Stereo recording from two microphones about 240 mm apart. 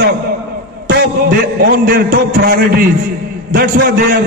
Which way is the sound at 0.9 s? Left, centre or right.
Right.